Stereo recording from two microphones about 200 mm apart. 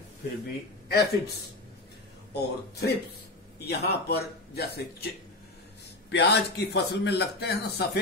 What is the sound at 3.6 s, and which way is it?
A man's voice, 55° left (ahead or behind).